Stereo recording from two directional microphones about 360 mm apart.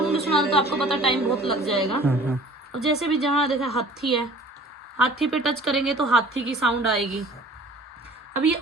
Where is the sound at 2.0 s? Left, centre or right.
Centre.